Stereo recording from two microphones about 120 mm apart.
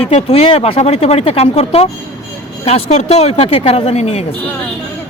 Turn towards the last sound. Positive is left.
turn(degrees=60)  # may be behind; listen again after turning